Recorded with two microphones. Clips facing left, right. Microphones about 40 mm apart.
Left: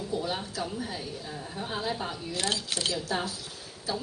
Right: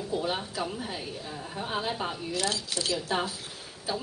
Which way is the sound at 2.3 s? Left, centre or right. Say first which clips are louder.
Left 1 dB; left.